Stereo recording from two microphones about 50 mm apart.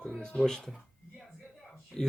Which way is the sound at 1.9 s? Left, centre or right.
Centre.